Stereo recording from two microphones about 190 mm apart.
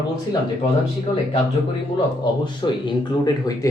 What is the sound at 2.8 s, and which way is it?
Speech, 20° left (ahead or behind).